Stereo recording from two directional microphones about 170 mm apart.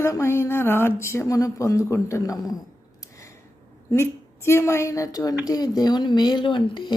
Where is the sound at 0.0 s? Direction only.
15° left (ahead or behind).